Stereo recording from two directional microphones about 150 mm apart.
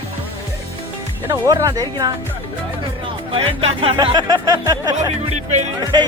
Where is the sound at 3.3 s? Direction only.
40° right (ahead or behind).